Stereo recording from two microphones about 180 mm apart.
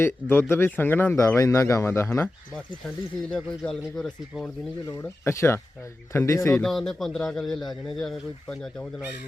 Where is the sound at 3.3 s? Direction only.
5° left (ahead or behind).